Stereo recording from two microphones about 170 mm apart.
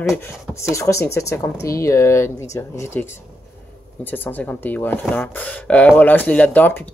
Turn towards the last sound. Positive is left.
turn(degrees=10)  # may be behind; listen again after turning